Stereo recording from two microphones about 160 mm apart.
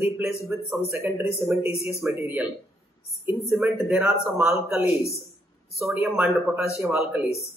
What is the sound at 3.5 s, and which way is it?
Speech, 5° right (ahead or behind).